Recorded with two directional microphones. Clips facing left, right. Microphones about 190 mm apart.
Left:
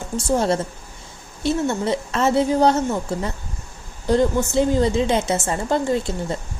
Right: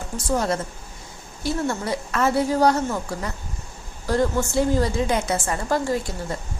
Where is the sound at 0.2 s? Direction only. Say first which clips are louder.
Left 4 dB; 25° left (ahead or behind).